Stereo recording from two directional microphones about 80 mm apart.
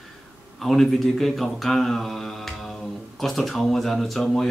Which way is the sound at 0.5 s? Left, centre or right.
Centre.